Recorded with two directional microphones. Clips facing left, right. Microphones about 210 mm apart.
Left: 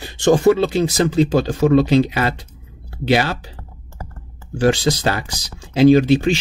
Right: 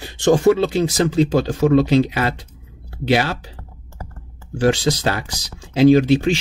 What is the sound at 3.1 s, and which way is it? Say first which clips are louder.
Speech: left 1 dB; 35° left (ahead or behind).